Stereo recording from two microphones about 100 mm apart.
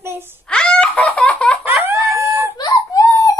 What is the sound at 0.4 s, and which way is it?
Laughter, 10° left (ahead or behind).